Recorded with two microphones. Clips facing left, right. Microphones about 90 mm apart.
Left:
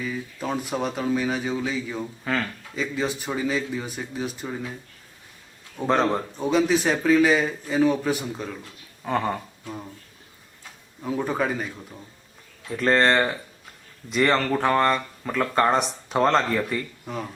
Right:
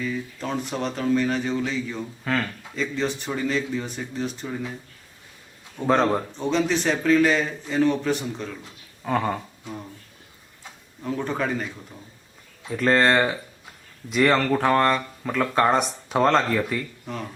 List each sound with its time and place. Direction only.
0.0 s speech: 5° left (ahead or behind)
5.7 s speech: centre (ahead or behind)
11.0 s speech: 5° left (ahead or behind)